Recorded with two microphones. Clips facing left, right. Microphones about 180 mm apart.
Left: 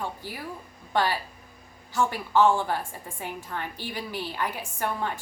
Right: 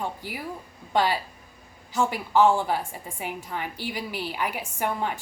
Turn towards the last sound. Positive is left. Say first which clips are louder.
# right 2 dB
turn(degrees=-15)  # may be behind; listen again after turning